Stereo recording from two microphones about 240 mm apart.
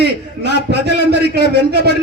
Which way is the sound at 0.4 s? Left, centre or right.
Right.